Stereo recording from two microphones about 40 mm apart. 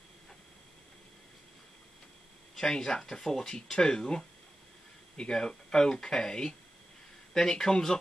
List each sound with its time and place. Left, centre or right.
2.6 s speech: centre